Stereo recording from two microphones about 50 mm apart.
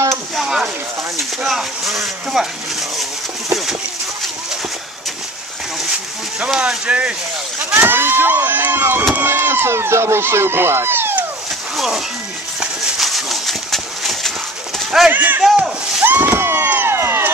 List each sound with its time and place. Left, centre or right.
0.1 s a sound: centre
1.4 s speech: centre
6.9 s speech: right
7.7 s vehicle: right
9.2 s speech: right
11.7 s a sound: centre
13.0 s horse: centre
15.0 s speech: right
16.0 s a sound: right